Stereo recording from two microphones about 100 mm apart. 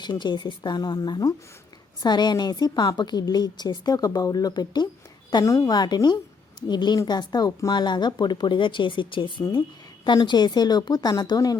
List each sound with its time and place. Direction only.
0.0 s a woman's voice: 50° left (ahead or behind)